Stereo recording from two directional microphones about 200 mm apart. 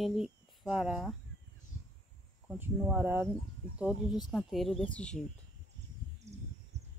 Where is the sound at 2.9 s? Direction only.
10° right (ahead or behind); by 5.2 s 5° left (ahead or behind).